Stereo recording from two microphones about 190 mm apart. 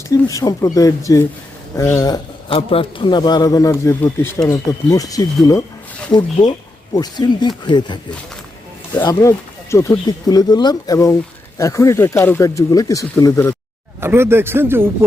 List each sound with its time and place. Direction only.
0.1 s a man's voice: 15° left (ahead or behind)
6.9 s a man's voice: 20° left (ahead or behind)
9.0 s speech: 15° left (ahead or behind)
14.0 s speech: 15° right (ahead or behind)